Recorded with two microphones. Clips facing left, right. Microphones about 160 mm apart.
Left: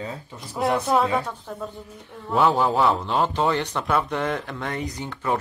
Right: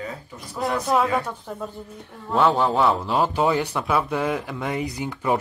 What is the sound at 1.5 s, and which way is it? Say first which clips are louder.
Speech: right 1 dB; 5° right (ahead or behind).